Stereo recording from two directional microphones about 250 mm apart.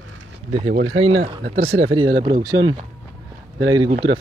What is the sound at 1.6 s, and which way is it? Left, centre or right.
Speech, right.